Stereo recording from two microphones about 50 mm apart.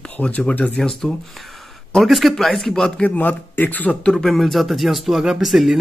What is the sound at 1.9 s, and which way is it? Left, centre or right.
Speech, centre.